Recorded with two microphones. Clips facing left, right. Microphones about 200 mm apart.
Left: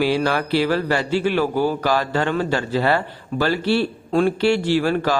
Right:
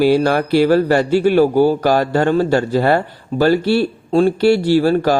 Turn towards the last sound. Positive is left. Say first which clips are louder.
# right 6 dB
turn(degrees=-40)  # may be behind; listen again after turning